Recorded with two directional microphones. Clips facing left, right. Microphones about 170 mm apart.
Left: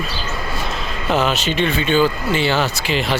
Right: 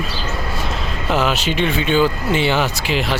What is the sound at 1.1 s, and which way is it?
Speech, 10° right (ahead or behind).